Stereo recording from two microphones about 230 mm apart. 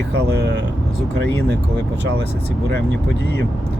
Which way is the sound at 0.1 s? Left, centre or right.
Right.